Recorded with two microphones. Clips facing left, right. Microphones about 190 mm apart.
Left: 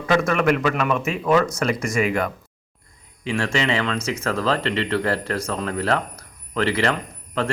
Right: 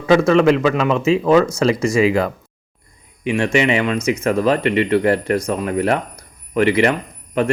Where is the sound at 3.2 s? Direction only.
15° right (ahead or behind).